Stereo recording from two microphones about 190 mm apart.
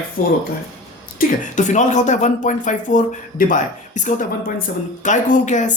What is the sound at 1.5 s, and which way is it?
Speech, 40° left (ahead or behind).